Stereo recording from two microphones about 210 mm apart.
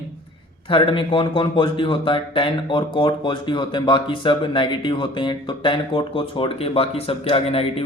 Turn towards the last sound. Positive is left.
turn(degrees=25)  # may be behind; listen again after turning